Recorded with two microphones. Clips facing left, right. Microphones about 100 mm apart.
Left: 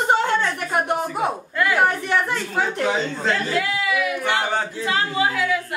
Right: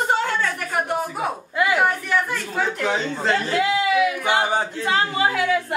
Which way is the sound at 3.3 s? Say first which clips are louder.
Right 4 dB; 25° right (ahead or behind).